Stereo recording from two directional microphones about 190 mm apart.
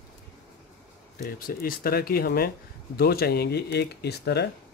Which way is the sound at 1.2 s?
50° left (ahead or behind).